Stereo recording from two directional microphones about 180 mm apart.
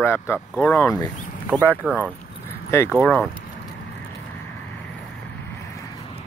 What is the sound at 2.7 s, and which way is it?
Speech, 15° left (ahead or behind).